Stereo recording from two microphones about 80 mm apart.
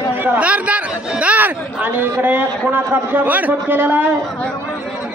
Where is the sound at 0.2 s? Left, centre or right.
Right.